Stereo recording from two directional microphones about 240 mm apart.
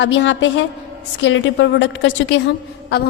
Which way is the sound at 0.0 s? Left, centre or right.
Left.